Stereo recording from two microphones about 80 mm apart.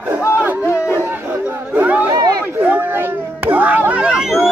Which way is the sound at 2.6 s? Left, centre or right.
Right.